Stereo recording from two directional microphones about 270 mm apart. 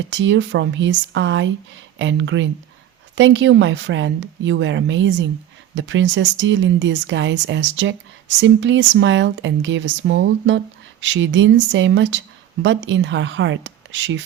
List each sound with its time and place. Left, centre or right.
0.1 s speech: right